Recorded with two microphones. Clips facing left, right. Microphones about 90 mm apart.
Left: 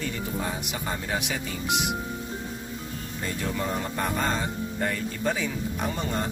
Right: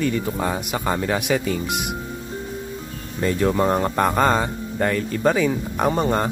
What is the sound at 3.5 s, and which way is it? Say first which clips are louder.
Speech: right 9 dB; 60° right (ahead or behind).